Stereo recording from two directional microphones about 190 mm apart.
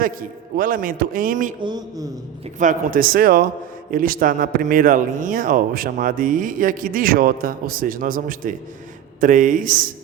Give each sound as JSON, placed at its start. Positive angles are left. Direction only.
{"t": 0.0, "sound": "a man's voice", "side_deg": -50}
{"t": 1.6, "sound": "a woman's voice", "side_deg": -20}
{"t": 2.6, "sound": "a man's voice", "side_deg": -45}